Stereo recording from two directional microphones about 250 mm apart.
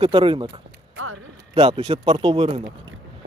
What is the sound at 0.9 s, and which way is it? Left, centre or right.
Speech, right.